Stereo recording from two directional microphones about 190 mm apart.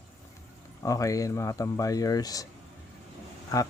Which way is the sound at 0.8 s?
15° left (ahead or behind).